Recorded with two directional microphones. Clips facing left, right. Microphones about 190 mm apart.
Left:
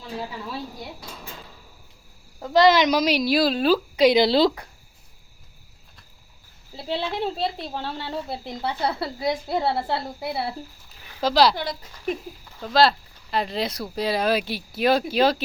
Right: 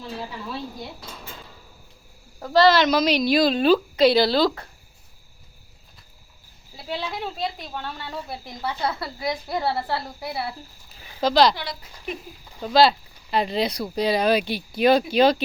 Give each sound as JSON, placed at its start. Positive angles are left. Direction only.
{"t": 0.2, "sound": "a woman's voice", "side_deg": 10}
{"t": 2.4, "sound": "a woman's voice", "side_deg": 20}
{"t": 6.7, "sound": "a woman's voice", "side_deg": 25}
{"t": 11.2, "sound": "a woman's voice", "side_deg": 5}
{"t": 11.5, "sound": "speech", "side_deg": 45}
{"t": 12.5, "sound": "a sound", "side_deg": -15}
{"t": 12.7, "sound": "speech", "side_deg": 0}